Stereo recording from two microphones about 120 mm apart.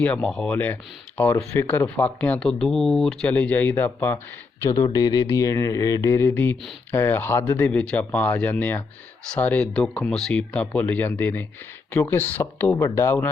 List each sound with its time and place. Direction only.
0.0 s speech: 10° left (ahead or behind)
4.7 s speech: 30° left (ahead or behind)
7.7 s speech: 10° left (ahead or behind)